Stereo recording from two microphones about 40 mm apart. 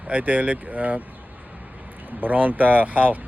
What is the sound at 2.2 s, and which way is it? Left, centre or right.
Speech, right.